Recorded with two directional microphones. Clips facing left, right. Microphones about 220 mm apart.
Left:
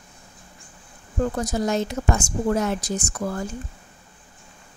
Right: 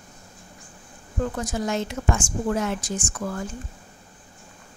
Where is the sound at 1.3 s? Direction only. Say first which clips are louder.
Left 3 dB; 40° left (ahead or behind).